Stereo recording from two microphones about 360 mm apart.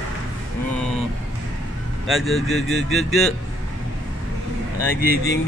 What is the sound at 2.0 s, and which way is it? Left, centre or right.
Music, centre.